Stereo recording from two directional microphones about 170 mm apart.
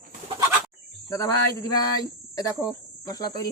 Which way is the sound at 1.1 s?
20° left (ahead or behind).